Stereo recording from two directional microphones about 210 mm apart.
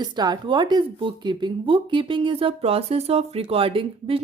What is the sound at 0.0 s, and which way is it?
Speech, 20° right (ahead or behind).